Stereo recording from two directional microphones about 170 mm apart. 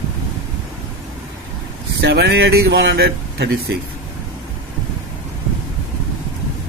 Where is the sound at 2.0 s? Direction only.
80° right.